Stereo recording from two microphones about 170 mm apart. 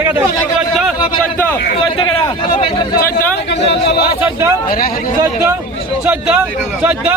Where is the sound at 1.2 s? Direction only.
15° left (ahead or behind).